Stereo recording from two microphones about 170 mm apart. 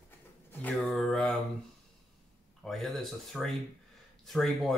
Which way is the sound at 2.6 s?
Centre (ahead or behind).